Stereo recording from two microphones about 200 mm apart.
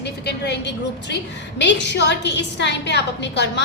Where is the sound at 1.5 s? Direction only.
60° left (ahead or behind).